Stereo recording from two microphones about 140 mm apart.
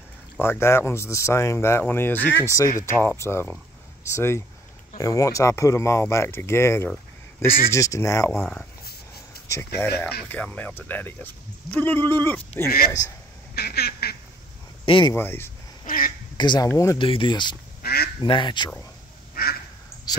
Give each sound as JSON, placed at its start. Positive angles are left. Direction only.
{"t": 0.4, "sound": "speech", "side_deg": 15}
{"t": 8.3, "sound": "speech", "side_deg": 5}
{"t": 9.5, "sound": "speech", "side_deg": 20}
{"t": 13.7, "sound": "duck", "side_deg": 90}
{"t": 14.9, "sound": "speech", "side_deg": 35}
{"t": 15.1, "sound": "speech", "side_deg": 15}
{"t": 15.8, "sound": "quack", "side_deg": 90}
{"t": 16.3, "sound": "speech", "side_deg": 30}
{"t": 17.0, "sound": "speech", "side_deg": 40}
{"t": 17.8, "sound": "duck", "side_deg": 90}
{"t": 18.2, "sound": "speech", "side_deg": 35}
{"t": 19.4, "sound": "duck", "side_deg": 90}